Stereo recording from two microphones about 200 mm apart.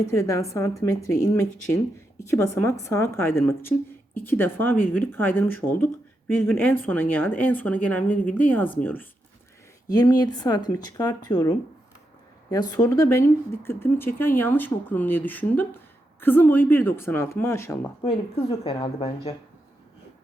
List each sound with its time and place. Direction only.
0.1 s speech: 15° left (ahead or behind)
18.6 s speech: 30° left (ahead or behind)